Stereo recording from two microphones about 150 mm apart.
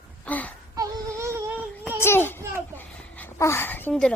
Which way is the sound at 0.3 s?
10° left (ahead or behind).